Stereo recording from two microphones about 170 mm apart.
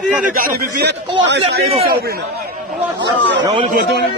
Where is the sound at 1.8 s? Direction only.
65° right (ahead or behind).